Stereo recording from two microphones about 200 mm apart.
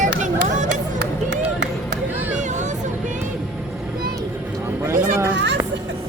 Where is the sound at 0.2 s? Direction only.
40° right (ahead or behind).